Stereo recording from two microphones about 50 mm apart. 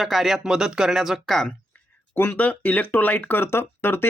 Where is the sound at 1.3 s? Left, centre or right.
Centre.